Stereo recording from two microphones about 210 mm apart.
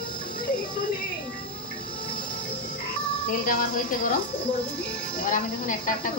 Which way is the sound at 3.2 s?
40° left (ahead or behind).